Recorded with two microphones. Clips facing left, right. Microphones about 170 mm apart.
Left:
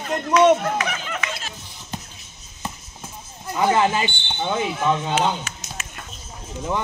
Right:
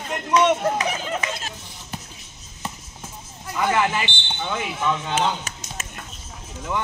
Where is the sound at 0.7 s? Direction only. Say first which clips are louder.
Right 1 dB; 35° right (ahead or behind).